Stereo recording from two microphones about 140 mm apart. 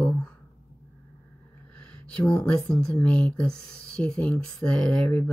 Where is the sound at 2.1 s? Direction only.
10° left (ahead or behind).